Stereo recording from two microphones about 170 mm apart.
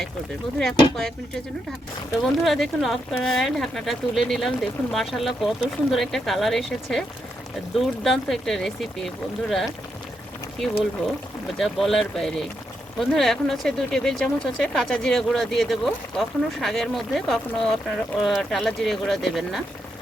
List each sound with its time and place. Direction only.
0.6 s speech: 5° left (ahead or behind)
2.2 s speech: centre (ahead or behind)
11.5 s speech: centre (ahead or behind)